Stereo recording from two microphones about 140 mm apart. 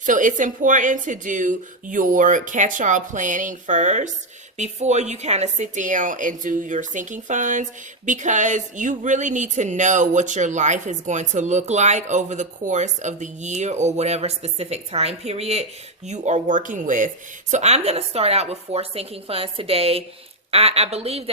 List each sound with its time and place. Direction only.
0.0 s a woman's voice: 65° right (ahead or behind); by 15.6 s 45° right (ahead or behind)
16.0 s a woman's voice: 55° right (ahead or behind)
17.5 s speech: 50° right (ahead or behind)